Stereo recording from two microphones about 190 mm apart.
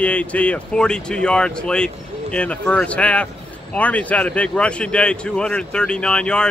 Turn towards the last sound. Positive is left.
turn(degrees=5)  # may be behind; listen again after turning